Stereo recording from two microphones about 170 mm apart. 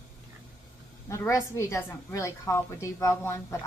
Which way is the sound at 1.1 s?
15° left (ahead or behind).